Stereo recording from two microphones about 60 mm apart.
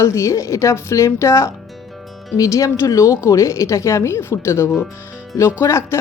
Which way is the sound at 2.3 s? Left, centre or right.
Left.